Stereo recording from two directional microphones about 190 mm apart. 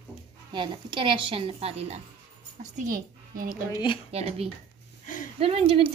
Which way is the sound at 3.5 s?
20° left (ahead or behind).